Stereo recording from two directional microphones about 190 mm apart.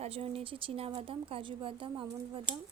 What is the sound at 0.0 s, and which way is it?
Speech, 30° right (ahead or behind).